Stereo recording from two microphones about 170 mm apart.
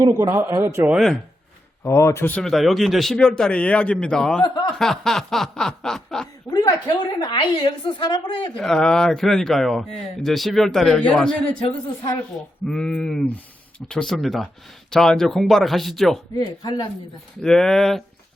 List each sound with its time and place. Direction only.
0.0 s speech: 20° right (ahead or behind)
1.8 s speech: 15° left (ahead or behind)
4.4 s a woman's voice: 20° left (ahead or behind)
4.8 s speech: 5° left (ahead or behind)
6.5 s a woman's voice: 20° left (ahead or behind)
8.5 s speech: 5° left (ahead or behind)
12.6 s speech: 5° left (ahead or behind)
16.3 s a woman's voice: 25° left (ahead or behind)
17.4 s speech: 5° left (ahead or behind)